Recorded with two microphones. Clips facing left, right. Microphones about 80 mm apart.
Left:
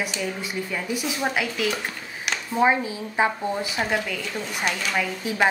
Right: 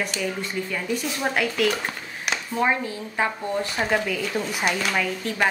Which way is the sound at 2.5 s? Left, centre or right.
Centre.